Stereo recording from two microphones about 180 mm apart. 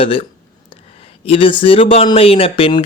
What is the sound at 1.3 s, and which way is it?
Speech, 30° left (ahead or behind).